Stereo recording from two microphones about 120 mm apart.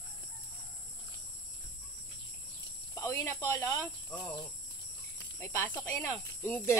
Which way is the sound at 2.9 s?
20° left (ahead or behind).